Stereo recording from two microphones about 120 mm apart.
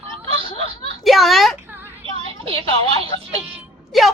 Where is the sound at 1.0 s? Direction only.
Centre (ahead or behind).